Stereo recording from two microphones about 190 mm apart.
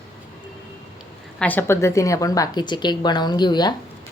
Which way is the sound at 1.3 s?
10° left (ahead or behind).